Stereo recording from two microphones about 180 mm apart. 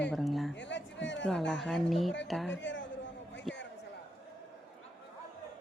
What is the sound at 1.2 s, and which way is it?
Speech, 5° left (ahead or behind).